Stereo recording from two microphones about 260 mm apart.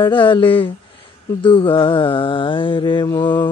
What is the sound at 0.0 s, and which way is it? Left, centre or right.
Mantra, centre.